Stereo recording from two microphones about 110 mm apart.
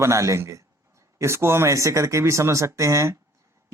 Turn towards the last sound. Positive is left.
turn(degrees=-25)  # may be behind; listen again after turning